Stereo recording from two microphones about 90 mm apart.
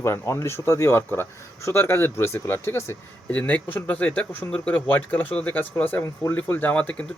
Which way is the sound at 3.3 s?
15° left (ahead or behind).